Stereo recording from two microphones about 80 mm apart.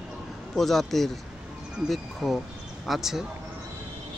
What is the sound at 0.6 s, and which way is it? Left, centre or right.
Speech, centre.